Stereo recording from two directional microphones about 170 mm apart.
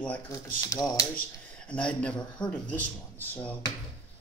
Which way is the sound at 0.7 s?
20° left (ahead or behind).